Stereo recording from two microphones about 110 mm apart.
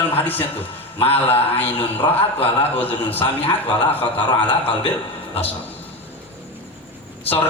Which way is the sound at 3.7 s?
60° left (ahead or behind).